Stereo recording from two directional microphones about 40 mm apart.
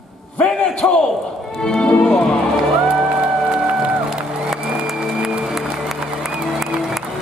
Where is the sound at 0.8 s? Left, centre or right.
Left.